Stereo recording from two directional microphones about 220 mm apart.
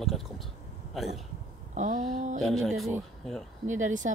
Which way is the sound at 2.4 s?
Centre (ahead or behind).